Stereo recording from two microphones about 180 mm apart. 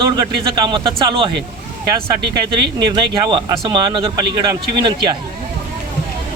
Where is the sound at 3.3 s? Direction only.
25° right (ahead or behind).